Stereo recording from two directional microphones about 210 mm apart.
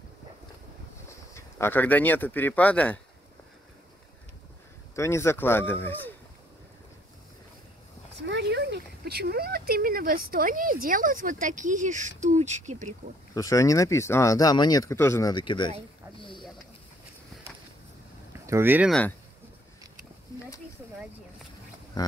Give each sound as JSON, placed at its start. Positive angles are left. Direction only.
{"t": 1.3, "sound": "speech", "side_deg": 10}
{"t": 4.9, "sound": "speech", "side_deg": 15}
{"t": 8.2, "sound": "speech", "side_deg": -55}
{"t": 13.3, "sound": "speech", "side_deg": 15}
{"t": 16.2, "sound": "a sound", "side_deg": 25}
{"t": 18.5, "sound": "speech", "side_deg": -10}
{"t": 22.0, "sound": "speech", "side_deg": 20}